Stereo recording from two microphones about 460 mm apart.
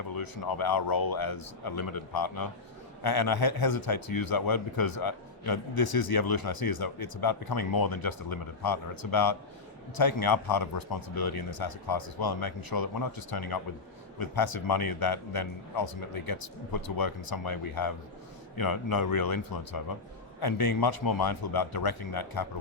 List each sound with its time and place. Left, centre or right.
0.1 s a man's voice: left